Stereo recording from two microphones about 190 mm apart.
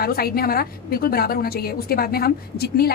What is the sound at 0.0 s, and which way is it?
A woman's voice, 55° left (ahead or behind).